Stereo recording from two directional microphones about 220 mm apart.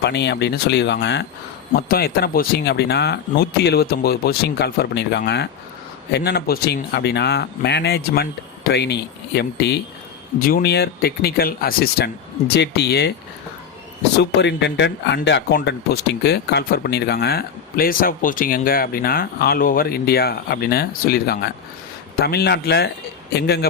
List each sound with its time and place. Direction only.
0.0 s speech: 50° left (ahead or behind)
14.2 s speech: 50° left (ahead or behind)